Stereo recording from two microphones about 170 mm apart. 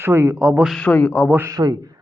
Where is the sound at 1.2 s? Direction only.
15° right (ahead or behind).